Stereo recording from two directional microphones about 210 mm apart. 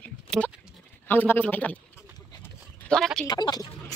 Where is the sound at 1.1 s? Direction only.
10° left (ahead or behind).